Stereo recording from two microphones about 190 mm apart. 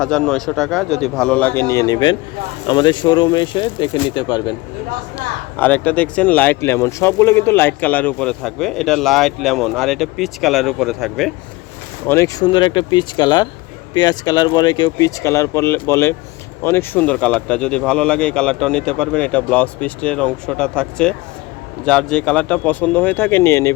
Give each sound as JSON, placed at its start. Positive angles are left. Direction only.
{"t": 0.0, "sound": "speech", "side_deg": 5}
{"t": 5.1, "sound": "speech", "side_deg": 10}
{"t": 12.0, "sound": "speech", "side_deg": 15}